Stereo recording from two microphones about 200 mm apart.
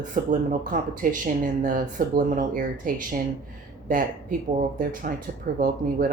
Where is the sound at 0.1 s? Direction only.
40° right (ahead or behind).